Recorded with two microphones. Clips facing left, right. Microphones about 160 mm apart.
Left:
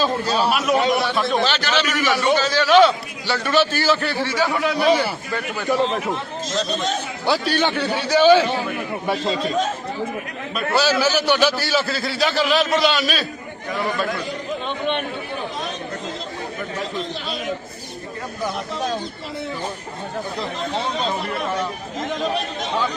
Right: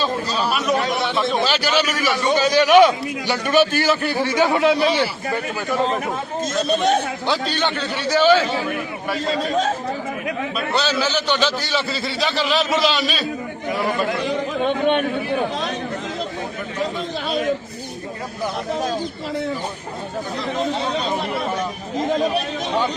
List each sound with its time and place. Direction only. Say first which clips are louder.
0.5 s a man's voice: left 1 dB; centre (ahead or behind); by 5.0 s 25° right (ahead or behind)
6.5 s speech: right 5 dB; 55° right (ahead or behind)
7.3 s a man's voice: left 5 dB; 10° left (ahead or behind)
10.8 s a man's voice: left 3 dB; 10° left (ahead or behind)
14.6 s a man's voice: right 7 dB; 50° right (ahead or behind)